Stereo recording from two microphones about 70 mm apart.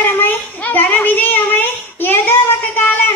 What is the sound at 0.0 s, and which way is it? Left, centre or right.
Child singing, left.